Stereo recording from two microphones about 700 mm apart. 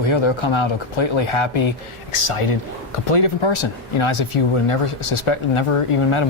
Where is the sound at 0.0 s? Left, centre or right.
Left.